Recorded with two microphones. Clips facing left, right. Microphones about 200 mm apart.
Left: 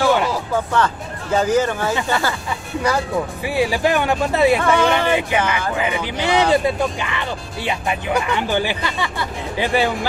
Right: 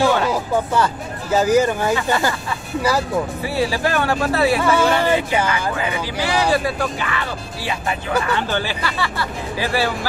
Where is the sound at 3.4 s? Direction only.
15° left (ahead or behind).